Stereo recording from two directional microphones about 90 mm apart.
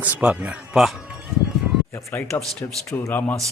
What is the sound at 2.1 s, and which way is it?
Speech, 20° left (ahead or behind).